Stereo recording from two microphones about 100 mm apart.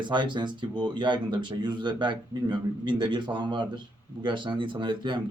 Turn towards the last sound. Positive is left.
turn(degrees=-55)  # may be behind; listen again after turning